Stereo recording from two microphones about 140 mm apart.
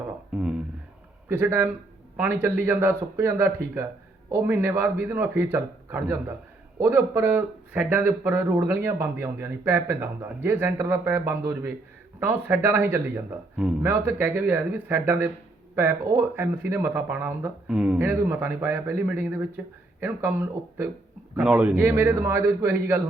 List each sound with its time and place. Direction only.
0.3 s speech: 5° right (ahead or behind)
1.3 s speech: 15° right (ahead or behind)